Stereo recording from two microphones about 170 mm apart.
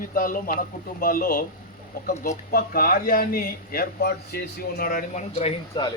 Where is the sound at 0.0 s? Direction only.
55° left (ahead or behind).